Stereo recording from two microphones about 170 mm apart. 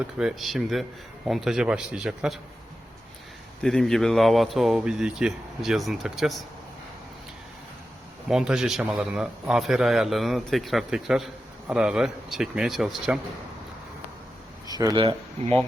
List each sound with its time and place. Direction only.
0.2 s a man's voice: centre (ahead or behind)
3.6 s a man's voice: 5° left (ahead or behind)
8.3 s a man's voice: 5° right (ahead or behind)
14.8 s speech: 25° right (ahead or behind)